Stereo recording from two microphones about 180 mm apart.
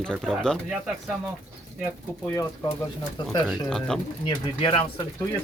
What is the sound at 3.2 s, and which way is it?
Speech, 25° left (ahead or behind).